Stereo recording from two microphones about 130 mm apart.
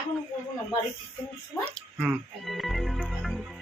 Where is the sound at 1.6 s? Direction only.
5° left (ahead or behind).